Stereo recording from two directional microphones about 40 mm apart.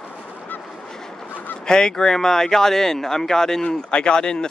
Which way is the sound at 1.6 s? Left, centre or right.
Centre.